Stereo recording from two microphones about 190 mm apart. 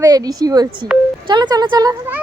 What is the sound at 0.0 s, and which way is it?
A child's voice, 20° right (ahead or behind).